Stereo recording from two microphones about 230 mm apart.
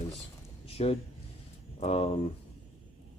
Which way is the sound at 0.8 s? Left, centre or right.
Left.